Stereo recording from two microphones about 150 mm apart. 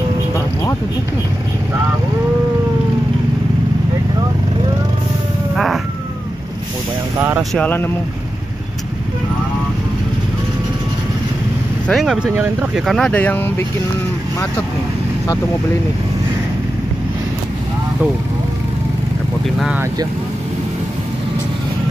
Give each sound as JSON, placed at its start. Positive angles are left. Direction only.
{"t": 7.2, "sound": "speech", "side_deg": -15}
{"t": 7.5, "sound": "speech", "side_deg": 10}
{"t": 11.9, "sound": "speech", "side_deg": -5}